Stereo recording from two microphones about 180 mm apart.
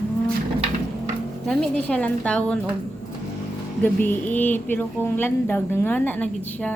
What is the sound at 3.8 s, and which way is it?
A woman's voice, 10° left (ahead or behind).